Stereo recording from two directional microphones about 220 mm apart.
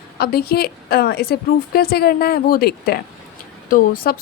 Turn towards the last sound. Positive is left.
turn(degrees=40)  # may be behind; listen again after turning